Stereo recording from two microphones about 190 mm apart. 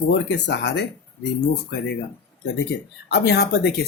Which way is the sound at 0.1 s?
65° left (ahead or behind).